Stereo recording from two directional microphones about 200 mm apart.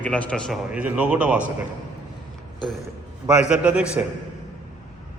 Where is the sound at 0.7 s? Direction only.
5° right (ahead or behind).